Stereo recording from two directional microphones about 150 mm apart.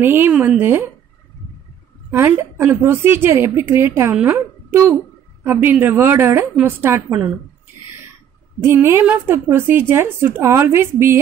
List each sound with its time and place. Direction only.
0.0 s a woman's voice: 15° right (ahead or behind)
2.0 s a woman's voice: 15° right (ahead or behind)
8.6 s a woman's voice: 15° right (ahead or behind)